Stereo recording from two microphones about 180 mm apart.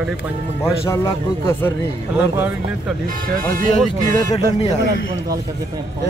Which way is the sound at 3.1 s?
50° right (ahead or behind).